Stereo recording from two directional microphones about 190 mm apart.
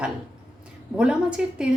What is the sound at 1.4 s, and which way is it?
Speech, 5° right (ahead or behind).